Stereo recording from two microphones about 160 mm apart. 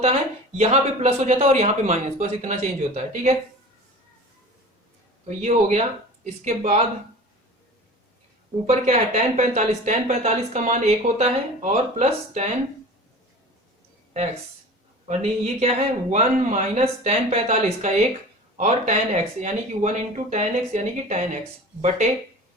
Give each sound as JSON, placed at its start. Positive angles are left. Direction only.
{"t": 0.0, "sound": "speech", "side_deg": -40}
{"t": 5.4, "sound": "speech", "side_deg": -45}
{"t": 8.6, "sound": "speech", "side_deg": -45}
{"t": 15.0, "sound": "speech", "side_deg": -45}